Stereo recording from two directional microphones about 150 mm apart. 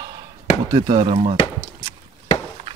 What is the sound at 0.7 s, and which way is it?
Speech, 35° right (ahead or behind).